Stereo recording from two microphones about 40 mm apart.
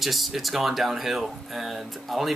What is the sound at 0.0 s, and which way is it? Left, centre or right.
Speech, centre.